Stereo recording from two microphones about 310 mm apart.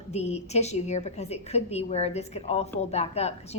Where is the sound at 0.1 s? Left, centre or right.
Left.